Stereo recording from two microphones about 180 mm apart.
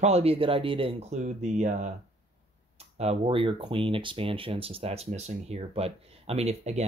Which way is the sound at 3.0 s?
35° right (ahead or behind).